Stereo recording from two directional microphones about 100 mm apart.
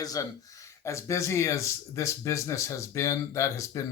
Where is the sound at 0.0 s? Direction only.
35° left (ahead or behind).